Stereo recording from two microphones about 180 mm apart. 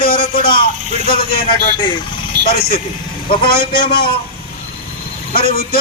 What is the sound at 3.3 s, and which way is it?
Speech, 30° left (ahead or behind).